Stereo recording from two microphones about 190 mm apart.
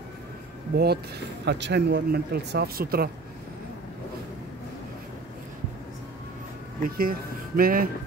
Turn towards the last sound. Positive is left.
turn(degrees=-50)  # may be behind; listen again after turning